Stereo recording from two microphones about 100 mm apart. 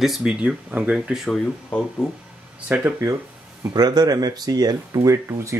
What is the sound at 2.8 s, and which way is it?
Speech, 25° right (ahead or behind).